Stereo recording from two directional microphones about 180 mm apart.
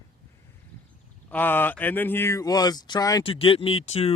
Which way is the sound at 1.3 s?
10° left (ahead or behind).